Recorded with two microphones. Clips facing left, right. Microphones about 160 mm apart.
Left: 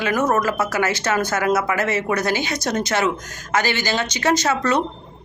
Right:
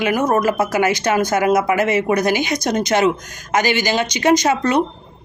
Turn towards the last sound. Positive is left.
turn(degrees=-15)  # may be behind; listen again after turning